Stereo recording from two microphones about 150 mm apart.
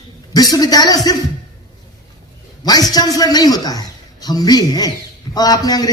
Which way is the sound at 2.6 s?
25° left (ahead or behind).